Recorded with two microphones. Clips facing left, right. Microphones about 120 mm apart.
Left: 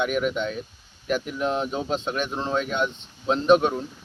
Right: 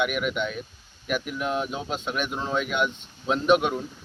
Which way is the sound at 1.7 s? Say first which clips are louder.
Left 4 dB; 5° right (ahead or behind).